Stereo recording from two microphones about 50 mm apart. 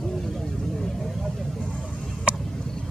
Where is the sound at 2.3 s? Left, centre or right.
Right.